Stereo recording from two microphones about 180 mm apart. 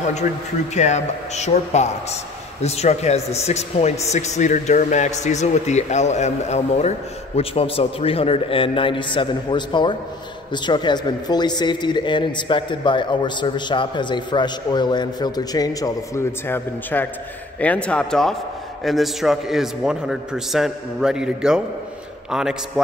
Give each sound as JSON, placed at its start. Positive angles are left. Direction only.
{"t": 0.7, "sound": "a man's voice", "side_deg": 40}